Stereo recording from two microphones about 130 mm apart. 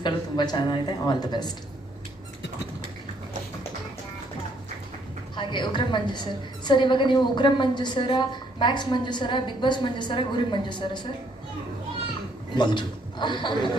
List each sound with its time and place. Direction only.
0.0 s a woman's voice: 35° left (ahead or behind)
5.4 s a woman's voice: 35° left (ahead or behind)
12.5 s a man's voice: 35° left (ahead or behind)